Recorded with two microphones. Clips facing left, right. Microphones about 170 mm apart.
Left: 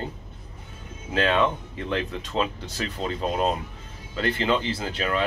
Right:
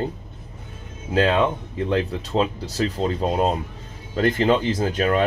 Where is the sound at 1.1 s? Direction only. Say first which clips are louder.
Right 3 dB; 35° right (ahead or behind).